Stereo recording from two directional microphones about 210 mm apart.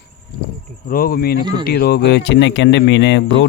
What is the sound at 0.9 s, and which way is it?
Speech, 45° left (ahead or behind).